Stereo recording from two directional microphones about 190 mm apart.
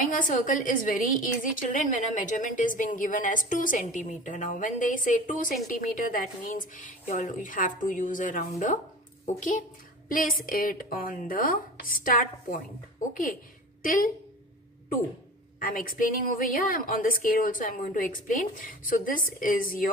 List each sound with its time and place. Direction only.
0.0 s a woman's voice: 45° left (ahead or behind)
15.6 s a woman's voice: 50° left (ahead or behind)